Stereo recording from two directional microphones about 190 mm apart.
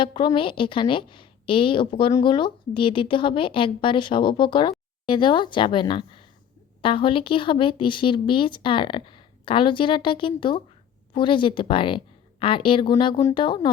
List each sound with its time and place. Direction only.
0.0 s speech: 25° left (ahead or behind)